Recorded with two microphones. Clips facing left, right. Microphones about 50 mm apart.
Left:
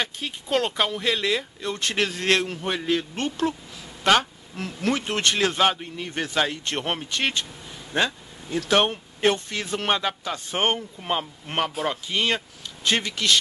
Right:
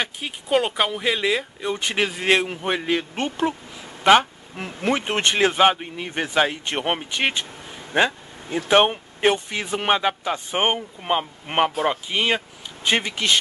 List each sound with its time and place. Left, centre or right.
0.0 s speech: centre